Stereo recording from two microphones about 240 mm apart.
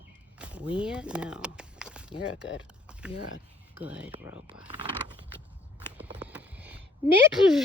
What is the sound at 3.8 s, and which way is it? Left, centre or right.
Speech, centre.